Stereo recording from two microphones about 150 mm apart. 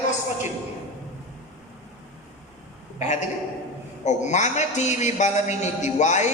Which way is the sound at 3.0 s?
50° left (ahead or behind).